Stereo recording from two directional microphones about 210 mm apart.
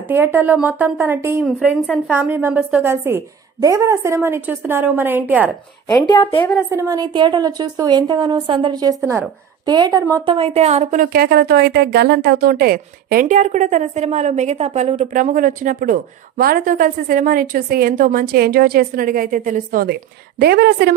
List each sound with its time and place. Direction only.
0.1 s a woman's voice: 10° right (ahead or behind)
5.9 s a woman's voice: 20° left (ahead or behind)
6.7 s a woman's voice: 15° right (ahead or behind); by 20.9 s 50° right (ahead or behind)